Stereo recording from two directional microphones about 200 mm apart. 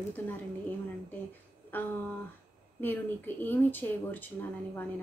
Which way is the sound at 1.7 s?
10° left (ahead or behind).